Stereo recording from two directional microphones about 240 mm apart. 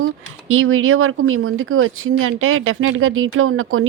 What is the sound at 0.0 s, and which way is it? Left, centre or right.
A woman's voice, right.